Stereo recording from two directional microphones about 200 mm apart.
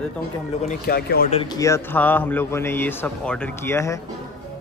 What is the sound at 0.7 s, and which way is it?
Speech, 50° left (ahead or behind).